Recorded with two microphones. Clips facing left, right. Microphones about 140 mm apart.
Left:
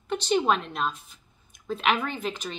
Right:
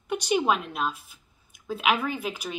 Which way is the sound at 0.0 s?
10° right (ahead or behind).